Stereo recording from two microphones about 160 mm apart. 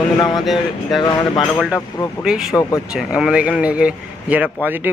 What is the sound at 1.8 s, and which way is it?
Speech, 20° left (ahead or behind).